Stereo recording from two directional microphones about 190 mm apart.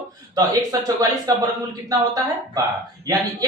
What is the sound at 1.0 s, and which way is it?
Speech, 20° right (ahead or behind).